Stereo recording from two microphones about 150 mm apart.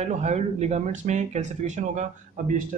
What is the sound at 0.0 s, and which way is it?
Speech, 50° right (ahead or behind).